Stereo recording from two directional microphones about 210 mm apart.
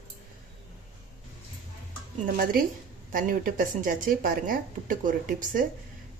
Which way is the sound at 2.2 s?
45° right (ahead or behind).